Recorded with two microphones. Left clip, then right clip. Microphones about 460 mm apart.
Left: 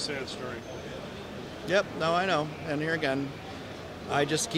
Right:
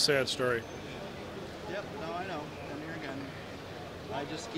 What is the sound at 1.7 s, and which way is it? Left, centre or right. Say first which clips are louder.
Speech: left 13 dB; left.